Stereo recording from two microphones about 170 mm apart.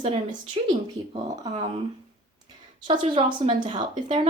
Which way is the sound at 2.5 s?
25° right (ahead or behind).